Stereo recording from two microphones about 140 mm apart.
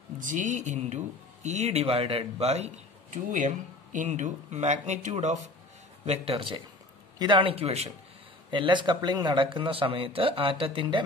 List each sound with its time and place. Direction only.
0.2 s speech: 65° right (ahead or behind)
6.0 s a man's voice: 45° right (ahead or behind)
8.5 s a man's voice: 35° right (ahead or behind)